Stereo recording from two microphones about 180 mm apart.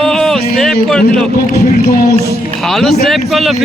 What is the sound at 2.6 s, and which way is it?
Speech, centre (ahead or behind).